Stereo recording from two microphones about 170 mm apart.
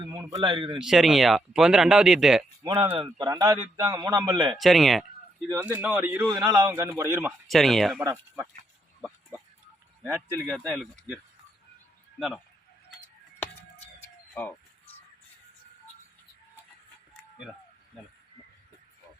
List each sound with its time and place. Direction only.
0.2 s a man's voice: 20° right (ahead or behind)
0.8 s speech: centre (ahead or behind)
2.6 s a man's voice: 15° right (ahead or behind)
3.0 s a man's voice: 25° right (ahead or behind)
4.5 s speech: centre (ahead or behind)
5.5 s a man's voice: 10° right (ahead or behind)
6.2 s a man's voice: 20° right (ahead or behind)
7.4 s speech: centre (ahead or behind)
8.0 s a man's voice: 15° right (ahead or behind)
9.0 s a sound: 5° right (ahead or behind)
10.0 s a man's voice: 15° right (ahead or behind)
10.7 s speech: centre (ahead or behind)